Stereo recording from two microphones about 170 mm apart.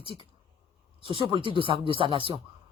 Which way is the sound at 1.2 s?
30° right (ahead or behind).